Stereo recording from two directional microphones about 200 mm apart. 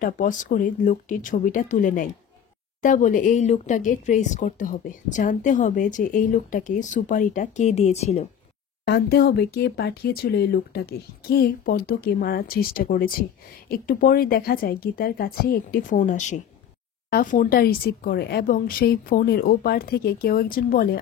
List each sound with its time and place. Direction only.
0.0 s speech: 40° left (ahead or behind)
8.8 s speech: 55° left (ahead or behind)